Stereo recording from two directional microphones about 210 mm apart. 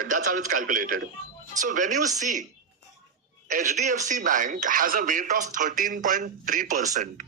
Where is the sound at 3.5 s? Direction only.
40° right (ahead or behind).